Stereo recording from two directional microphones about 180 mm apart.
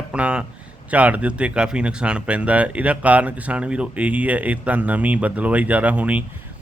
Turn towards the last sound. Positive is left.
turn(degrees=-10)  # may be behind; listen again after turning